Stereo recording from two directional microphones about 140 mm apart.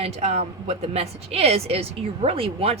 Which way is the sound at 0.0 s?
50° right (ahead or behind).